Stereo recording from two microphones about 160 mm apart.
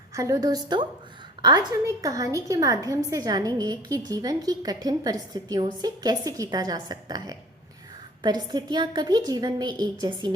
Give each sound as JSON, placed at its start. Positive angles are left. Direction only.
{"t": 0.1, "sound": "a woman's voice", "side_deg": -20}